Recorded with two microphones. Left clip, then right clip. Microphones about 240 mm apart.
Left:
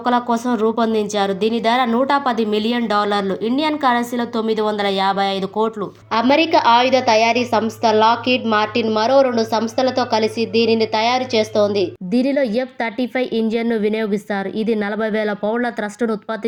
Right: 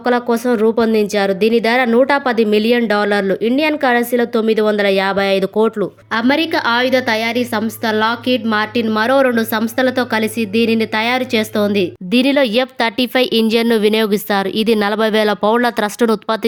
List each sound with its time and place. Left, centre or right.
0.0 s speech: right
6.1 s speech: right